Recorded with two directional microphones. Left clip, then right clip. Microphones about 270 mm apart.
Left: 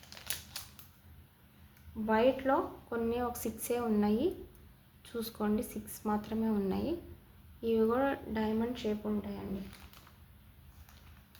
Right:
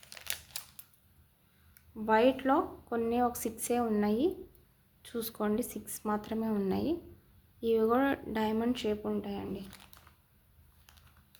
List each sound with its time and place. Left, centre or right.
0.1 s typewriter: right
2.0 s a woman's voice: right